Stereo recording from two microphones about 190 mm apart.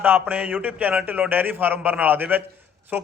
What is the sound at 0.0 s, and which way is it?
A man's voice, 10° right (ahead or behind).